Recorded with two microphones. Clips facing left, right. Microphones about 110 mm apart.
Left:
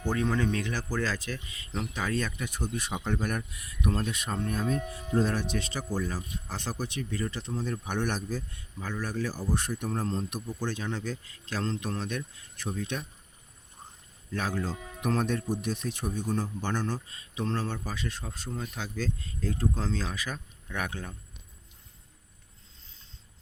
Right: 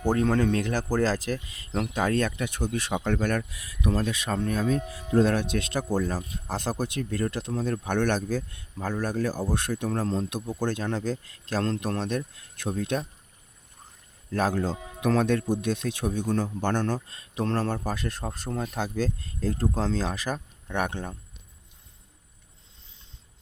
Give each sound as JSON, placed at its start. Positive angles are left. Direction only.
{"t": 0.0, "sound": "speech", "side_deg": -45}
{"t": 1.7, "sound": "a man's voice", "side_deg": -70}
{"t": 2.0, "sound": "speech", "side_deg": -55}
{"t": 5.1, "sound": "speech", "side_deg": -70}
{"t": 11.9, "sound": "speech", "side_deg": -40}
{"t": 12.4, "sound": "speech", "side_deg": -60}
{"t": 14.3, "sound": "speech", "side_deg": -45}
{"t": 14.7, "sound": "speech", "side_deg": -20}
{"t": 15.0, "sound": "a man's voice", "side_deg": -80}